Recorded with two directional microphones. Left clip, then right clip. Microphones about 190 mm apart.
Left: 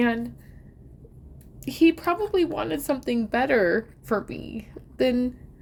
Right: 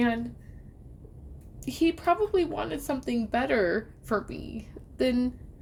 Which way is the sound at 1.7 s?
30° left (ahead or behind).